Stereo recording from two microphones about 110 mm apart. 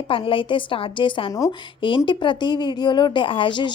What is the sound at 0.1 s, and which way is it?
A woman's voice, 55° left (ahead or behind).